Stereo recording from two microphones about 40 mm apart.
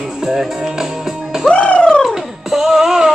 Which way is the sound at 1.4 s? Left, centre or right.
Left.